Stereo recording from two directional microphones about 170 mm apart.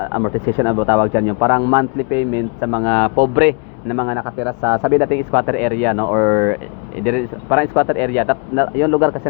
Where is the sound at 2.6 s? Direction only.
20° right (ahead or behind).